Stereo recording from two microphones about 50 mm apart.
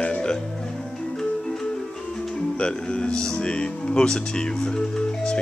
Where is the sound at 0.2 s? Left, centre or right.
Centre.